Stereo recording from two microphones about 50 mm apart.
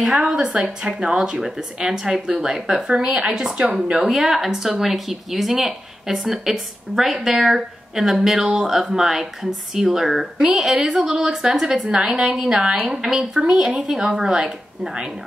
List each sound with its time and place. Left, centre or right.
0.1 s a woman's voice: centre